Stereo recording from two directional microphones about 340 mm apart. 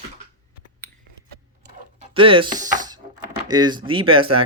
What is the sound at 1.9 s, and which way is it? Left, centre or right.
Speech, centre.